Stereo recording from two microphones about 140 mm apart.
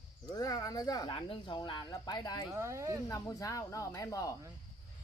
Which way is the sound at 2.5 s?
20° right (ahead or behind).